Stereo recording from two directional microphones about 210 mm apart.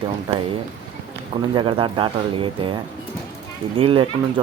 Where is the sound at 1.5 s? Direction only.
25° right (ahead or behind).